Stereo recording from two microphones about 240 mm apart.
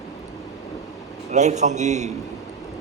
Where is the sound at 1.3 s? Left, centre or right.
Right.